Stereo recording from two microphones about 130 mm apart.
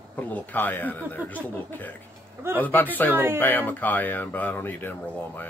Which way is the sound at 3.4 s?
15° left (ahead or behind).